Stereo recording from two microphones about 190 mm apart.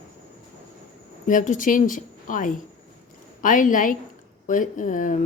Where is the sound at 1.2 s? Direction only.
40° left (ahead or behind).